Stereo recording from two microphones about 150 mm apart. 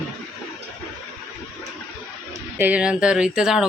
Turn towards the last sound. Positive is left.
turn(degrees=-5)  # may be behind; listen again after turning